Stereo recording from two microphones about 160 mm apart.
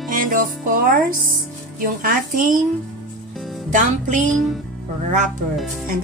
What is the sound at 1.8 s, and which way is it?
Speech, 60° right (ahead or behind).